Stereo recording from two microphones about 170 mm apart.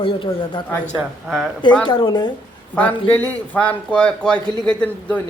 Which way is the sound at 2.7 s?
10° left (ahead or behind).